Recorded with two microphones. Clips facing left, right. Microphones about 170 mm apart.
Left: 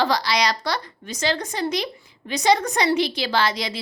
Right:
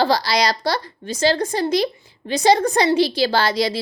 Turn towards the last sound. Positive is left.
turn(degrees=-35)  # may be behind; listen again after turning